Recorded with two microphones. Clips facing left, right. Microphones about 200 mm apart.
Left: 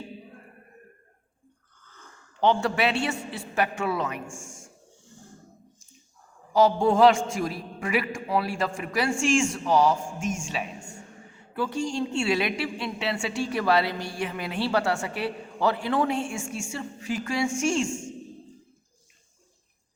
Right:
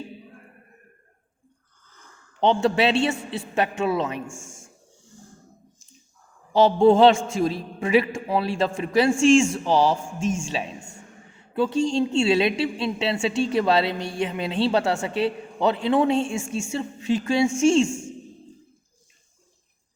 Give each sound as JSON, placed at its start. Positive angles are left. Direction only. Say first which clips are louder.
{"t": 2.4, "sound": "a woman's voice", "louder": "right 3 dB", "side_deg": -20}
{"t": 6.5, "sound": "a woman's voice", "louder": "right 5 dB", "side_deg": -25}